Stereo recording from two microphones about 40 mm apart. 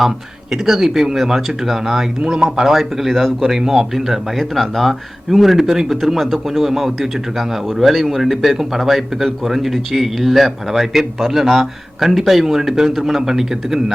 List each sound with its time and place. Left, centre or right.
0.5 s speech: centre
2.2 s speech: right
2.7 s speech: centre